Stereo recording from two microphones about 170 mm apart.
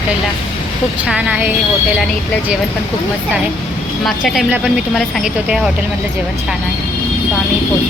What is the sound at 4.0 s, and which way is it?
Speech, centre (ahead or behind).